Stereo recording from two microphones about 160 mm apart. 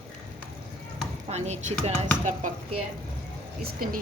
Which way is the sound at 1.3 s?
45° right (ahead or behind).